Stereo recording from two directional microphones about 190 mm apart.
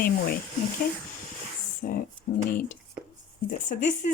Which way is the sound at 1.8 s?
50° left (ahead or behind).